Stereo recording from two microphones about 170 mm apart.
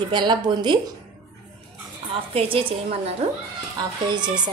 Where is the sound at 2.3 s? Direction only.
35° right (ahead or behind).